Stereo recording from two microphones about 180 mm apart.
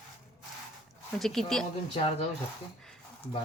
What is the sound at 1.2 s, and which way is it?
Speech, centre (ahead or behind).